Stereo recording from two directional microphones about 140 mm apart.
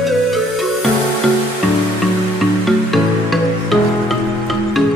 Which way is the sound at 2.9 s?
Centre (ahead or behind).